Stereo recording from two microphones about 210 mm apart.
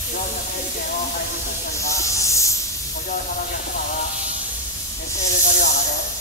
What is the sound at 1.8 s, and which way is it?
Hiss, 15° left (ahead or behind).